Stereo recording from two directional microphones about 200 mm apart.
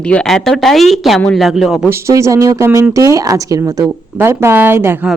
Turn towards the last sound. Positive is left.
turn(degrees=-10)  # may be behind; listen again after turning